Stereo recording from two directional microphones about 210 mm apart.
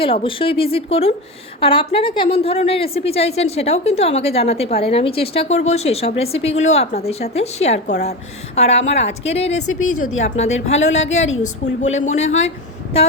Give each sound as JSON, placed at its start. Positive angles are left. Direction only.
{"t": 0.0, "sound": "a woman's voice", "side_deg": 25}